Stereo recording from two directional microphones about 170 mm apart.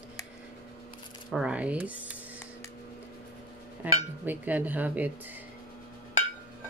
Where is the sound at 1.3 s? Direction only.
5° right (ahead or behind).